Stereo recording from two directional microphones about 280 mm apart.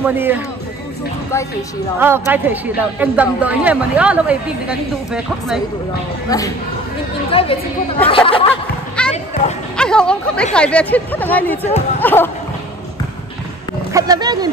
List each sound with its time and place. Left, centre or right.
0.0 s speech: centre
2.0 s speech: centre
7.2 s a woman's voice: centre
9.0 s children playing: centre
9.4 s a sound: left
9.8 s speech: centre
13.9 s speech: centre